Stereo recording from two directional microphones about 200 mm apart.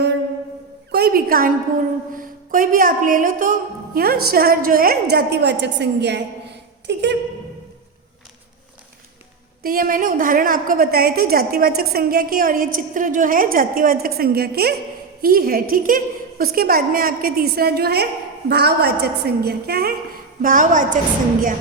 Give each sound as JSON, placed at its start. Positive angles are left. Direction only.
{"t": 0.9, "sound": "a woman's voice", "side_deg": -55}
{"t": 9.6, "sound": "a woman's voice", "side_deg": -45}
{"t": 20.4, "sound": "a woman's voice", "side_deg": -40}